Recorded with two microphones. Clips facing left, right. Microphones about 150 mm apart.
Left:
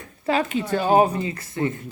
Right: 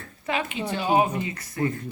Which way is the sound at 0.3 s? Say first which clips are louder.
Left 6 dB; 40° left (ahead or behind).